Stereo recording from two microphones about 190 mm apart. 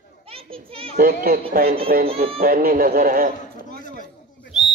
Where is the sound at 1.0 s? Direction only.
50° right (ahead or behind).